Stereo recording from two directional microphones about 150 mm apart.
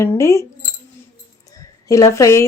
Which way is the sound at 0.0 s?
20° left (ahead or behind).